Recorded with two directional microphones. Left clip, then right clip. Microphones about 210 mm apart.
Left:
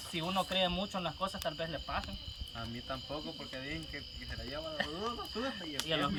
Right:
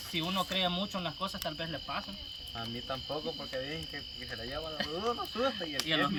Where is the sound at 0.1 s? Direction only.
5° left (ahead or behind).